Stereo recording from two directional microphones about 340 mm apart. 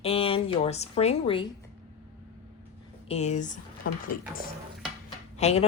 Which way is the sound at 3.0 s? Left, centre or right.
Centre.